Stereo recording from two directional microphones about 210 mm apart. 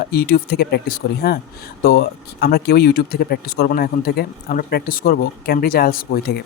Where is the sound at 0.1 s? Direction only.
45° left (ahead or behind).